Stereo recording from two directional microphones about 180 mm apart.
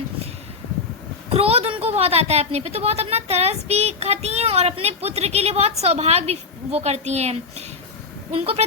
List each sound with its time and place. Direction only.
1.3 s a woman's voice: 35° right (ahead or behind)